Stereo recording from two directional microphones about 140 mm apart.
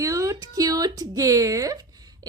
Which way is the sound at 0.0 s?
25° right (ahead or behind).